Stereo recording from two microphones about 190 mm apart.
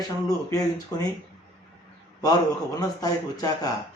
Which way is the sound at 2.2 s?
20° left (ahead or behind).